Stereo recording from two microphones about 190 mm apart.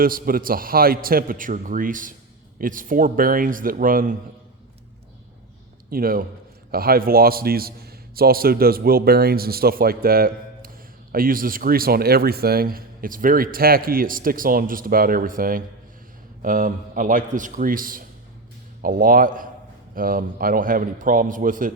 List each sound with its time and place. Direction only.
0.0 s a man's voice: 50° right (ahead or behind)
5.9 s a man's voice: 50° right (ahead or behind)